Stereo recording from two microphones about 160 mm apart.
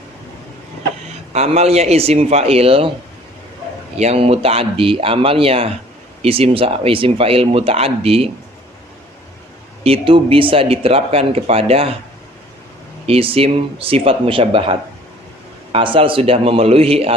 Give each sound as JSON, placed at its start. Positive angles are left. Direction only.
{"t": 1.3, "sound": "speech", "side_deg": -40}
{"t": 3.9, "sound": "speech", "side_deg": -40}
{"t": 9.8, "sound": "speech", "side_deg": -35}
{"t": 13.1, "sound": "speech", "side_deg": -35}